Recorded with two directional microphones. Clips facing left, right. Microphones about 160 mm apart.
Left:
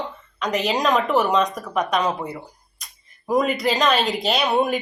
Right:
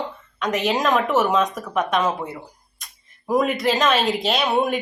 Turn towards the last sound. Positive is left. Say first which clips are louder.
# even
turn(degrees=0)  # may be behind; listen again after turning